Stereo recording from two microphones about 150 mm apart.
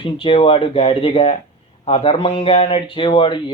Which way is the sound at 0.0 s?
35° left (ahead or behind).